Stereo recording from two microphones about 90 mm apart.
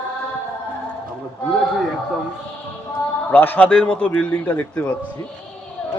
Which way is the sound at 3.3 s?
20° left (ahead or behind).